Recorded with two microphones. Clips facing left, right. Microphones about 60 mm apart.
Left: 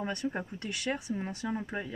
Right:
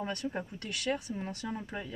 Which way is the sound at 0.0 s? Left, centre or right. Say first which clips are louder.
Left 2 dB; centre.